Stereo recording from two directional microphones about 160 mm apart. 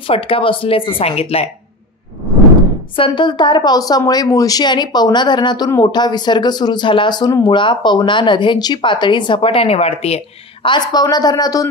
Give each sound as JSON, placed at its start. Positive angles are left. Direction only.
{"t": 0.0, "sound": "speech", "side_deg": 35}
{"t": 3.0, "sound": "speech", "side_deg": 30}